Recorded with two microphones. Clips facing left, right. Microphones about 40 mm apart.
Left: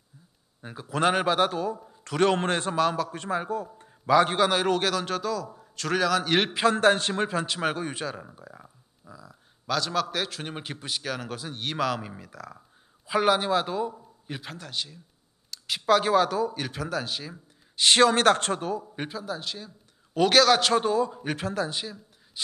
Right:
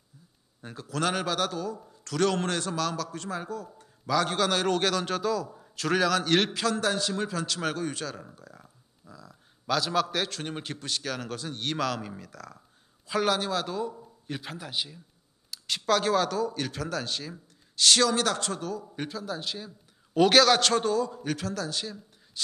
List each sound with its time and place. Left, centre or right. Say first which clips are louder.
0.6 s a man's voice: left 1 dB; centre
0.8 s a man's voice: left 5 dB; left
6.5 s a man's voice: left 6 dB; left; by 14.4 s centre
14.4 s a man's voice: even; centre
15.6 s a man's voice: left 3 dB; centre
17.7 s a man's voice: left 3 dB; left
18.1 s a man's voice: left 6 dB; left; by 19.2 s centre
19.2 s a man's voice: even; centre; by 21.8 s left